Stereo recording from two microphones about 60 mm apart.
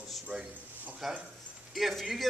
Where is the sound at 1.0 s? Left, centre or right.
Centre.